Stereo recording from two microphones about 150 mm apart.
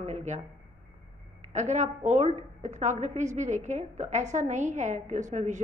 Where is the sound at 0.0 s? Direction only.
50° right (ahead or behind).